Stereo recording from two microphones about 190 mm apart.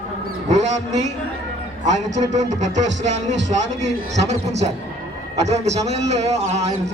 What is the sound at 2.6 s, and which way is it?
A man's voice, 40° right (ahead or behind).